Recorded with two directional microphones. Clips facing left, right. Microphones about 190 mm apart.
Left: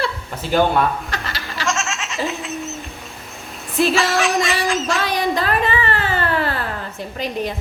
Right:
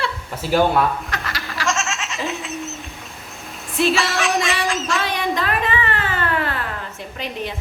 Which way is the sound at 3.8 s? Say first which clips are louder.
Left 2 dB; centre (ahead or behind).